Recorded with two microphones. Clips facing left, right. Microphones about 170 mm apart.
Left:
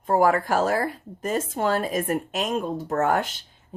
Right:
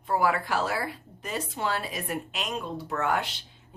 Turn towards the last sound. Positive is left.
turn(degrees=45)  # may be behind; listen again after turning